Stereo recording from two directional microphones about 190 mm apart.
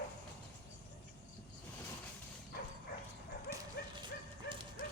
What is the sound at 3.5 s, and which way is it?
Dog, 55° left (ahead or behind).